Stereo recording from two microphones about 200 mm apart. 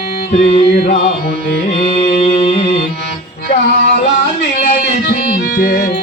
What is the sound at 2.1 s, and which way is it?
Mantra, 35° left (ahead or behind).